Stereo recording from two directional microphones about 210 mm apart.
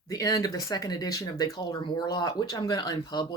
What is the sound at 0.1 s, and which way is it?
Speech, 20° left (ahead or behind).